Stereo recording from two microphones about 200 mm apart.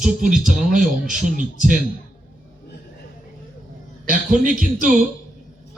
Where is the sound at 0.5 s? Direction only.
40° right (ahead or behind).